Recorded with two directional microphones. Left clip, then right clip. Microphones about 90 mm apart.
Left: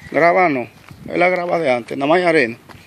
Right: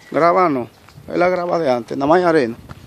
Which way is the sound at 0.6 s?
35° right (ahead or behind).